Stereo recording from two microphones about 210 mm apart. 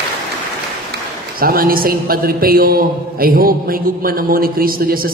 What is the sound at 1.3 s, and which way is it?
A man's voice, 45° right (ahead or behind).